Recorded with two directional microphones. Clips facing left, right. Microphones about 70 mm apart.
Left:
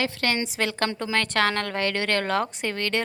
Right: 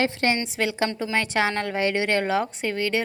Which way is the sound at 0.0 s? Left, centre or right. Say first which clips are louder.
Right 3 dB; right.